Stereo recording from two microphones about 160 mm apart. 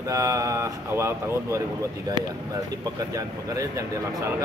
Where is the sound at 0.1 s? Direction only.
20° right (ahead or behind).